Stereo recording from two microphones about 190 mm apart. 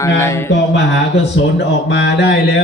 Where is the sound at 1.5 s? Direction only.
65° left (ahead or behind).